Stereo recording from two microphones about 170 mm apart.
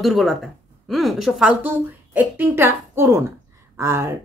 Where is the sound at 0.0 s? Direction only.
Centre (ahead or behind).